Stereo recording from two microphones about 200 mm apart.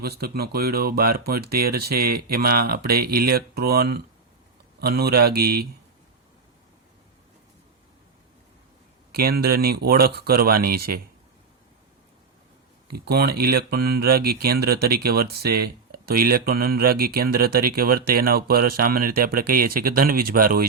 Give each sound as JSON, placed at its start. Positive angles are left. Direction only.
{"t": 0.0, "sound": "speech", "side_deg": -50}
{"t": 9.1, "sound": "speech", "side_deg": -50}
{"t": 12.9, "sound": "speech", "side_deg": -50}